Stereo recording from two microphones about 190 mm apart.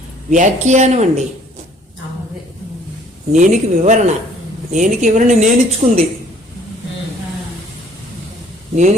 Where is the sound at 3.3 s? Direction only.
40° right (ahead or behind).